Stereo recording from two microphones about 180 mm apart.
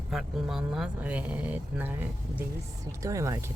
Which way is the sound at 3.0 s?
15° right (ahead or behind).